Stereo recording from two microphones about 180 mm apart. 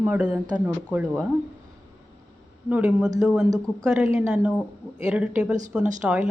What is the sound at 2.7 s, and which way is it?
A woman's voice, 10° right (ahead or behind).